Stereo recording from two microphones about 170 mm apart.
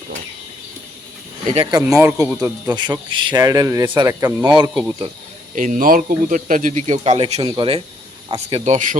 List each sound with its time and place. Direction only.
1.5 s speech: 20° right (ahead or behind)
2.7 s a man's voice: 25° right (ahead or behind)
4.5 s a man's voice: 25° right (ahead or behind)
5.5 s speech: 50° right (ahead or behind)